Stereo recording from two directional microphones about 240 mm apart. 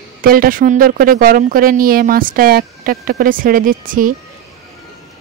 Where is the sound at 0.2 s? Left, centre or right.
Right.